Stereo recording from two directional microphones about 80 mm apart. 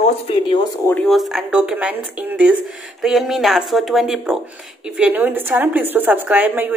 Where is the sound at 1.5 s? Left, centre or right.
Centre.